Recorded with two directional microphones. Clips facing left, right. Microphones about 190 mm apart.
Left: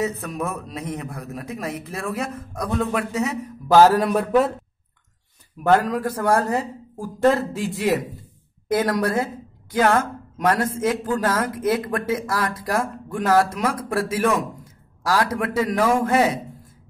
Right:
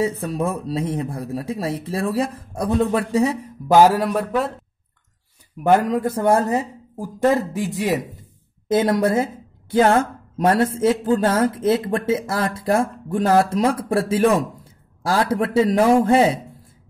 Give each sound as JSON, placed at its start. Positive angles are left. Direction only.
{"t": 0.0, "sound": "a man's voice", "side_deg": -30}
{"t": 3.7, "sound": "speech", "side_deg": -15}
{"t": 4.1, "sound": "a man's voice", "side_deg": 0}
{"t": 5.6, "sound": "speech", "side_deg": -20}